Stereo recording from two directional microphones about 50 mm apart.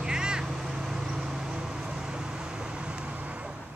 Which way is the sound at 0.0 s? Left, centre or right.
Centre.